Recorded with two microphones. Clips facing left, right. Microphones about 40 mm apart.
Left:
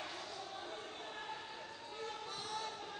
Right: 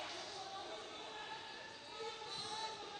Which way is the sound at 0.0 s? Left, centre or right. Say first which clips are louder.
Left 2 dB; left.